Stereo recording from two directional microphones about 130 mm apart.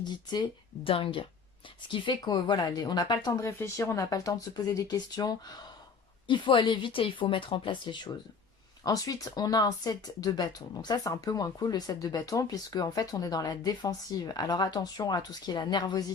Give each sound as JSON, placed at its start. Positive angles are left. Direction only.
{"t": 0.0, "sound": "speech", "side_deg": 35}
{"t": 8.8, "sound": "speech", "side_deg": 30}